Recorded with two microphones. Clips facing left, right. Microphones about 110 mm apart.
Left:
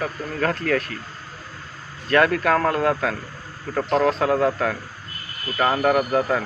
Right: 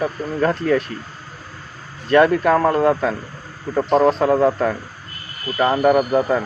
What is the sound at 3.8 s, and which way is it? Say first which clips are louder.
Speech: right 4 dB; 20° right (ahead or behind).